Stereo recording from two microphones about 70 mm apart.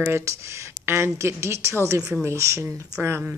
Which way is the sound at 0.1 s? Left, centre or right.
Right.